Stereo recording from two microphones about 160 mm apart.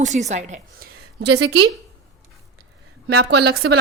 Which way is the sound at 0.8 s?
75° right (ahead or behind).